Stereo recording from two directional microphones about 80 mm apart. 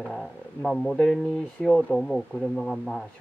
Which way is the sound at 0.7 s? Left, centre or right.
Centre.